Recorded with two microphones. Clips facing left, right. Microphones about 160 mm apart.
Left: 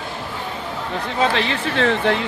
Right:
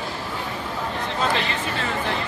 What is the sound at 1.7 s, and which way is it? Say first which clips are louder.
Speech: left 11 dB; 80° left.